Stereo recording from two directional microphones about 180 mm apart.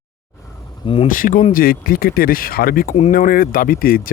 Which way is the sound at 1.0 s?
50° left (ahead or behind).